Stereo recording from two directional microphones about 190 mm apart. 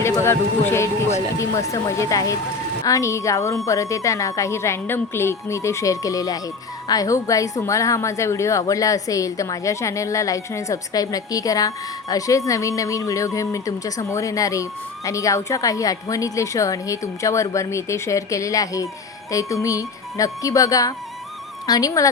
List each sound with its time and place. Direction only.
0.0 s speech: 15° left (ahead or behind)